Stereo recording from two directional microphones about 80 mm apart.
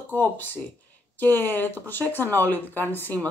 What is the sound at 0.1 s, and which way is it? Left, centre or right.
Speech, left.